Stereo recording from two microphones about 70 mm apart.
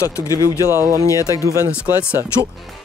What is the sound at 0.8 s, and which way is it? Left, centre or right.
Speech, right.